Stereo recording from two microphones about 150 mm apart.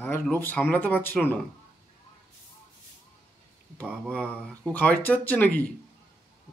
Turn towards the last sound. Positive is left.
turn(degrees=10)  # may be behind; listen again after turning